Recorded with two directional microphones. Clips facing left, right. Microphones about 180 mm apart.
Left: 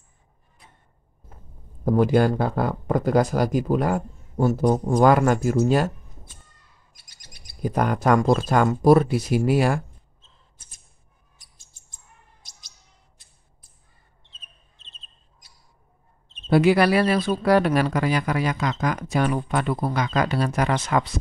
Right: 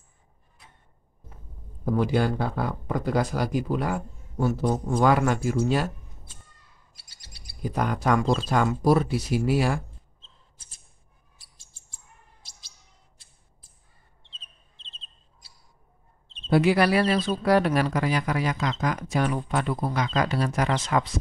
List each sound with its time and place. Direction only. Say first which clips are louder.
1.9 s speech: left 5 dB; 50° left (ahead or behind)
7.0 s bird: left 1 dB; 30° right (ahead or behind)
7.6 s speech: left 4 dB; 50° left (ahead or behind)
12.4 s bird: left 1 dB; 30° right (ahead or behind)
16.4 s speech: left 3 dB; 65° left (ahead or behind)